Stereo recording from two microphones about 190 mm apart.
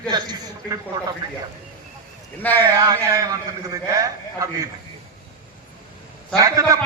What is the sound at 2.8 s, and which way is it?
A man's voice, 20° right (ahead or behind).